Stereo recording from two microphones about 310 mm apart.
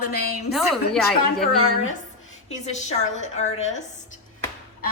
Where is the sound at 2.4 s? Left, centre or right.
Left.